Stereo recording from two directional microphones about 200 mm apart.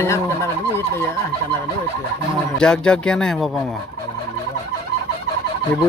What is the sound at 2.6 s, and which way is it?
Speech, 5° left (ahead or behind).